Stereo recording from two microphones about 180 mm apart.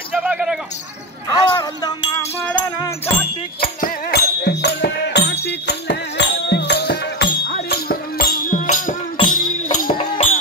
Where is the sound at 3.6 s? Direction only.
55° left (ahead or behind).